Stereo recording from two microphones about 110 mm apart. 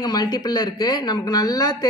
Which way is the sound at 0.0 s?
40° left (ahead or behind).